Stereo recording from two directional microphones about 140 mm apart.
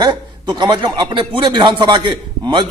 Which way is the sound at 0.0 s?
30° right (ahead or behind).